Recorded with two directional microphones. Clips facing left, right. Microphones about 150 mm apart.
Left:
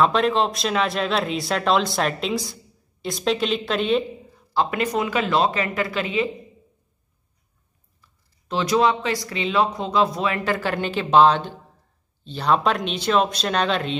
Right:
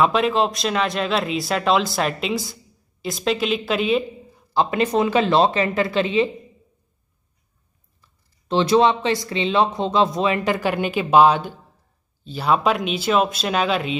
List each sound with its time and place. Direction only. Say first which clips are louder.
0.0 s speech: right 1 dB; 5° right (ahead or behind)
4.6 s speech: right 3 dB; 25° right (ahead or behind)
8.5 s speech: right 3 dB; 25° right (ahead or behind); by 13.9 s 5° right (ahead or behind)